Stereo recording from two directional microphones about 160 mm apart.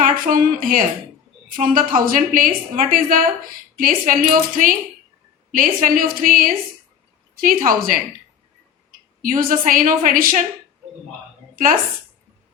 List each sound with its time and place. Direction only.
0.0 s a woman's voice: 60° right (ahead or behind)
9.2 s a woman's voice: 60° right (ahead or behind)
11.5 s speech: 60° right (ahead or behind)